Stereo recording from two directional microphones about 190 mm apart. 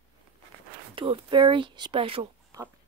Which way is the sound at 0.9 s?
25° right (ahead or behind).